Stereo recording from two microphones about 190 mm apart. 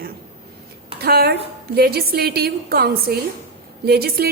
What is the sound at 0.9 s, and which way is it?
A woman's voice, 55° right (ahead or behind).